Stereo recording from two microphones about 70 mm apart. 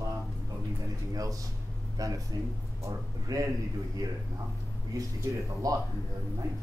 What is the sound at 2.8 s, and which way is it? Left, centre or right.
A man's voice, right.